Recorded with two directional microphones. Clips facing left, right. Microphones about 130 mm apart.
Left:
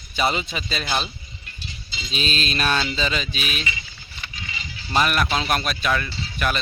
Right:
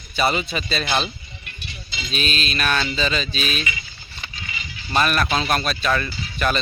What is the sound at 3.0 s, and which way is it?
Speech, 15° left (ahead or behind).